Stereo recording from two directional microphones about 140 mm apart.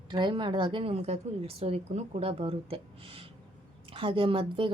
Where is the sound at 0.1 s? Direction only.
35° right (ahead or behind).